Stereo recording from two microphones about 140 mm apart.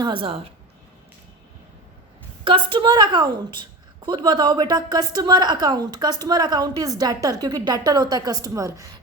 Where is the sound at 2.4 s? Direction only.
35° right (ahead or behind).